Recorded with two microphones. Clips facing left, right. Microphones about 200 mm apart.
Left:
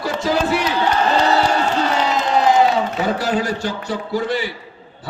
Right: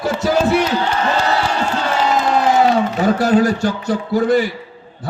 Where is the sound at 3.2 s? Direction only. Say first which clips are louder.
Right 6 dB; 50° right (ahead or behind).